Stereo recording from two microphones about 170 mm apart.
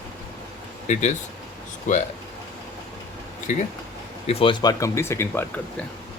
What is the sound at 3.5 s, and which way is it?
Speech, 45° left (ahead or behind).